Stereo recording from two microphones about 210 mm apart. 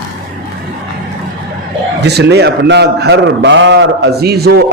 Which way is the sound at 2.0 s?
55° right (ahead or behind).